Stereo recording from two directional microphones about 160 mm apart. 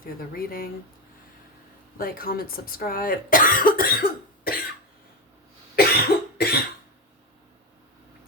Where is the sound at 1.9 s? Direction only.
65° left (ahead or behind).